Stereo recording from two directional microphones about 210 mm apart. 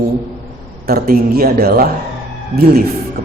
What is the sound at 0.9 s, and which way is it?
A man's voice, 45° right (ahead or behind).